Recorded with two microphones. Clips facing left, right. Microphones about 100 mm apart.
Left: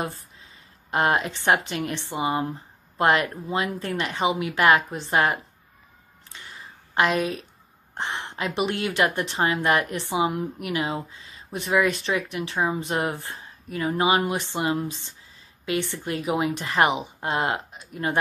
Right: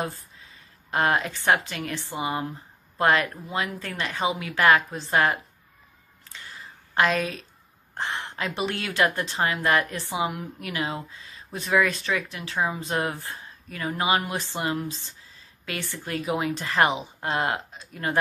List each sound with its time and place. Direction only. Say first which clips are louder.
0.9 s a woman's voice: left 1 dB; 25° left (ahead or behind)
6.2 s a sound: even; 20° left (ahead or behind)
7.9 s a woman's voice: even; 20° left (ahead or behind)